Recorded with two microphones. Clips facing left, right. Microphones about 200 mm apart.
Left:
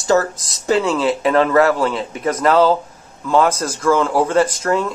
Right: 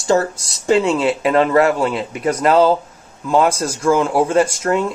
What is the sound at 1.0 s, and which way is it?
Speech, 10° right (ahead or behind).